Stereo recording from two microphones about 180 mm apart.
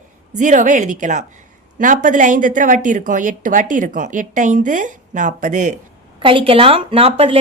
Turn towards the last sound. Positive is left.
turn(degrees=-30)  # may be behind; listen again after turning